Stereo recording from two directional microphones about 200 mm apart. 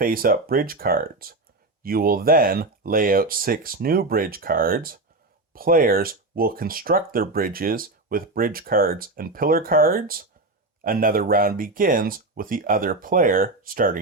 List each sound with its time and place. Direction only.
0.0 s speech: 45° right (ahead or behind)